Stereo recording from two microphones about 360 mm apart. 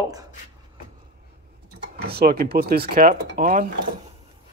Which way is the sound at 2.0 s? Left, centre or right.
Right.